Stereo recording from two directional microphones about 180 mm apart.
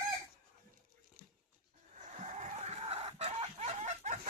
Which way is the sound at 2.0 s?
40° right (ahead or behind).